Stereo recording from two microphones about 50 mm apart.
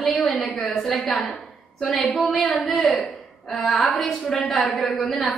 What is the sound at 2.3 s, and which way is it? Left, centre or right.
A woman's voice, centre.